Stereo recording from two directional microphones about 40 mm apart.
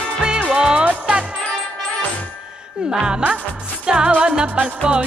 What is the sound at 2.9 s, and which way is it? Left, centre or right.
Speech, centre.